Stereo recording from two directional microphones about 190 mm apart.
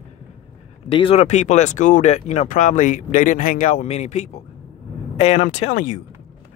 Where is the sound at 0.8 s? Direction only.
30° left (ahead or behind).